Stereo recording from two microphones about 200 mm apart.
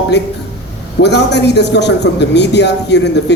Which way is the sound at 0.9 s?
60° left (ahead or behind).